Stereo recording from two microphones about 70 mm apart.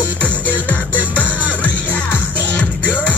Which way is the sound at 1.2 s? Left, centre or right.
Left.